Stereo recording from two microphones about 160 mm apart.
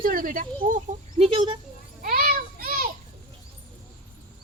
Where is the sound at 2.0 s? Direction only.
65° right (ahead or behind).